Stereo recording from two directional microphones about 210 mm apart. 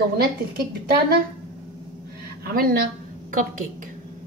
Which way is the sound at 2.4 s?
45° right (ahead or behind).